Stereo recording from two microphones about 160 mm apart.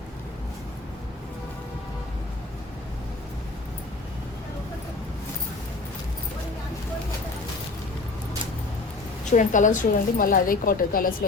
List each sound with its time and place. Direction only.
9.3 s a woman's voice: 50° left (ahead or behind)